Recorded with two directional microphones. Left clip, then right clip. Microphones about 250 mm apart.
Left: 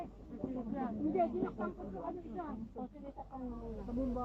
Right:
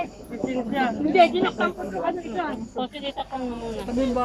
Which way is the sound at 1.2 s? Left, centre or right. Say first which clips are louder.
Right 17 dB; right.